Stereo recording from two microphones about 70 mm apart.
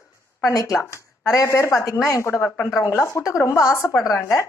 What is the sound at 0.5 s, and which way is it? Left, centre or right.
A woman's voice, left.